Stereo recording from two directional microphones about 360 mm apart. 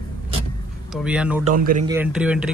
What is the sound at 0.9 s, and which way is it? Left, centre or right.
Speech, centre.